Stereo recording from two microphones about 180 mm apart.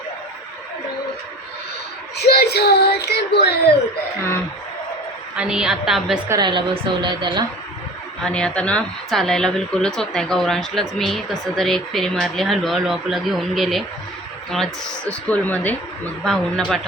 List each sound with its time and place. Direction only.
2.1 s speech: 65° left (ahead or behind)
5.4 s speech: 5° right (ahead or behind)
6.2 s a woman's voice: 20° right (ahead or behind)
8.2 s speech: 5° left (ahead or behind)